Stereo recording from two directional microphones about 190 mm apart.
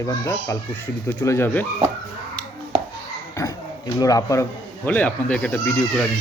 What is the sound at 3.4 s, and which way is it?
Dog, 15° left (ahead or behind).